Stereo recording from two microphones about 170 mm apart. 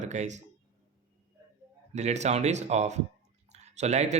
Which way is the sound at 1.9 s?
40° right (ahead or behind).